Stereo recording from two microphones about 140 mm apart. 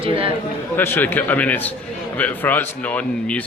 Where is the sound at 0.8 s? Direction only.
15° left (ahead or behind).